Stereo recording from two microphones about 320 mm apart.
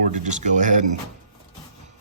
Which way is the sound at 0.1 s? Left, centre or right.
Right.